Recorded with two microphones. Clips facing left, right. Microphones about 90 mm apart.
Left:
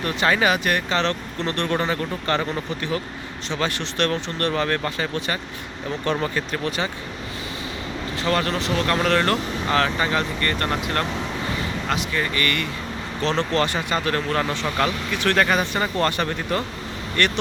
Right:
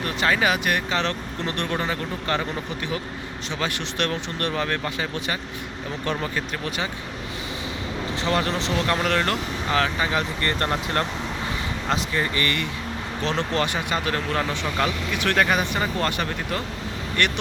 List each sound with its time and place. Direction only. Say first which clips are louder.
0.0 s speech: left 2 dB; centre (ahead or behind)
8.1 s speech: left 1 dB; 20° right (ahead or behind)
10.4 s speech: left 1 dB; 25° right (ahead or behind)
13.2 s speech: left 3 dB; 10° right (ahead or behind)